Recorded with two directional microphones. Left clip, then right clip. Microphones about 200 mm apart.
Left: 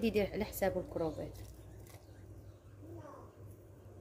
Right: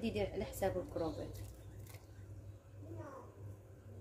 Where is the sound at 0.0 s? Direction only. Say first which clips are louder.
Left 5 dB; 30° left (ahead or behind).